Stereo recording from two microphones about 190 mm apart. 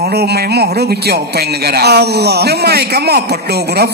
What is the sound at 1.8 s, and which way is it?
A man's voice, 60° right (ahead or behind).